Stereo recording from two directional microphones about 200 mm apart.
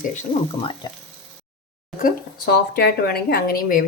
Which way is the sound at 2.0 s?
55° left (ahead or behind).